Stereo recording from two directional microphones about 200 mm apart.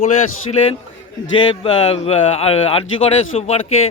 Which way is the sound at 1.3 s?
30° left (ahead or behind).